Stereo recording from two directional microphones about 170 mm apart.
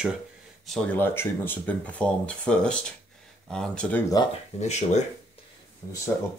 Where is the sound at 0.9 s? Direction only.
15° left (ahead or behind).